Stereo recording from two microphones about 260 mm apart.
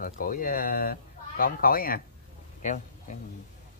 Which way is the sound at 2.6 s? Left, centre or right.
Left.